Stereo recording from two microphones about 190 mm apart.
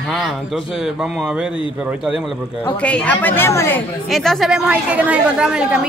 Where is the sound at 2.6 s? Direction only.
5° left (ahead or behind).